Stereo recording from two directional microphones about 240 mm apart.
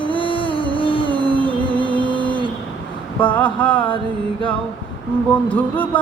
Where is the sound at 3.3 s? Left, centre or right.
Centre.